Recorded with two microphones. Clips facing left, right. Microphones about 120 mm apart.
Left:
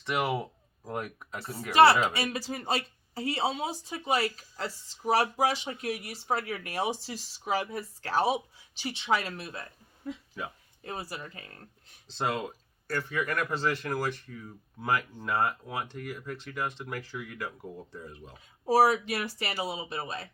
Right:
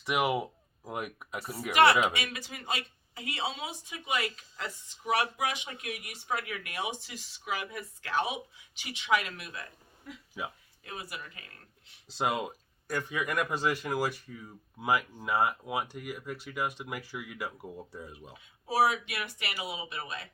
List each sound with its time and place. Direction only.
0.0 s speech: 10° right (ahead or behind)
1.7 s speech: 35° left (ahead or behind)
10.4 s speech: 5° right (ahead or behind)
10.8 s speech: 35° left (ahead or behind)
12.0 s speech: 10° right (ahead or behind)
18.3 s speech: 40° left (ahead or behind)